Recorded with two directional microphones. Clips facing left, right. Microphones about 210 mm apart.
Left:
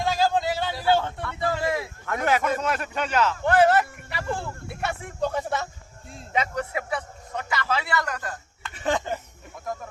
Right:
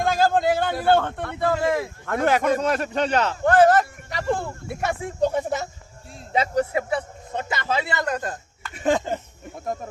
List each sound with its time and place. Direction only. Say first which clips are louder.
0.0 s a man's voice: right 3 dB; 50° right (ahead or behind); by 9.2 s 30° right (ahead or behind)